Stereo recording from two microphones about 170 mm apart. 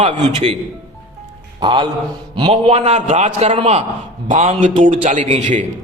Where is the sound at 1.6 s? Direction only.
25° right (ahead or behind); by 5.6 s 45° right (ahead or behind).